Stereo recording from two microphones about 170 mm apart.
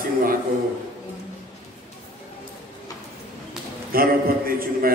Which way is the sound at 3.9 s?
60° right (ahead or behind).